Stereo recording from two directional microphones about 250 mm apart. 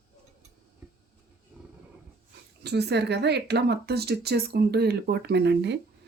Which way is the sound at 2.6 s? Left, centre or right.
Right.